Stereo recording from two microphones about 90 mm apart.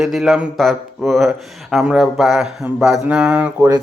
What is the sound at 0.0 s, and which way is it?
Speech, 5° right (ahead or behind).